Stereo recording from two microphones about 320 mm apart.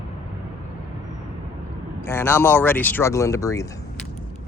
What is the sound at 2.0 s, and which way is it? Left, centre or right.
Speech, centre.